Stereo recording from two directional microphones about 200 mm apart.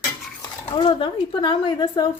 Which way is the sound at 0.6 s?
25° left (ahead or behind).